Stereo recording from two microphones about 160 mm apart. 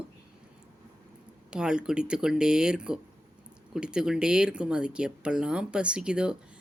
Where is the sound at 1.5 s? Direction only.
5° right (ahead or behind).